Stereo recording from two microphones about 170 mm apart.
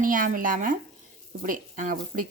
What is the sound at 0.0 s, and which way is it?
A woman's voice, 55° right (ahead or behind).